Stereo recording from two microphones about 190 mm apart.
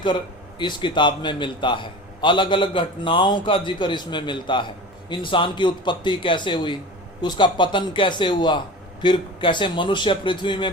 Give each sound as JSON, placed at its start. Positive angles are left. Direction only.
{"t": 0.6, "sound": "a man's voice", "side_deg": 25}